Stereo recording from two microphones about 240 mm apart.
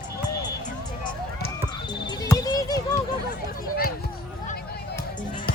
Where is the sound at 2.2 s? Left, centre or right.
Centre.